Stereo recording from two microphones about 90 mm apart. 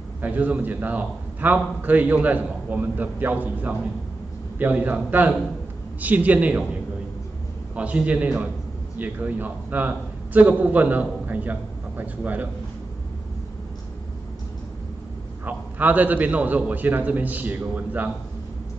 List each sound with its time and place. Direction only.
0.2 s a man's voice: 20° right (ahead or behind)
7.7 s a man's voice: 15° right (ahead or behind)
15.4 s a man's voice: 20° right (ahead or behind)